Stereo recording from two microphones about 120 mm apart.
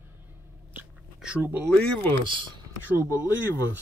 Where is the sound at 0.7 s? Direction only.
10° right (ahead or behind).